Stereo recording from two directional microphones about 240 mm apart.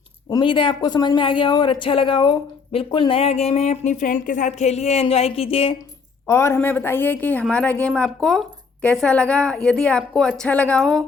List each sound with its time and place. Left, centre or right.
0.3 s speech: centre
6.2 s a woman's voice: centre